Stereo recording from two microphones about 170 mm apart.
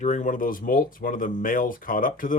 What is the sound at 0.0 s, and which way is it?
Speech, 45° left (ahead or behind).